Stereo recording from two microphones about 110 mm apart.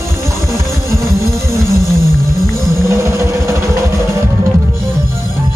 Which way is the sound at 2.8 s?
25° right (ahead or behind).